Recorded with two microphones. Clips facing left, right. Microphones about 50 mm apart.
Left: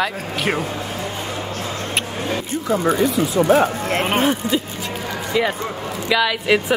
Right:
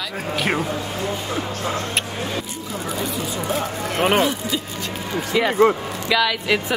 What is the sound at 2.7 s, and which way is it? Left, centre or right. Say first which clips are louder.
Speech: left 10 dB; left.